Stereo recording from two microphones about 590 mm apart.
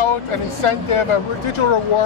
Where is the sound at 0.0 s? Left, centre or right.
Left.